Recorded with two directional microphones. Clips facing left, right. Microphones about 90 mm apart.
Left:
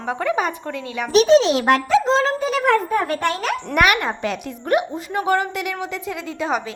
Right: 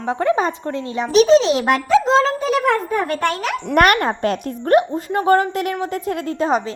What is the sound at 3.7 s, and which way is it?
A woman's voice, 45° right (ahead or behind).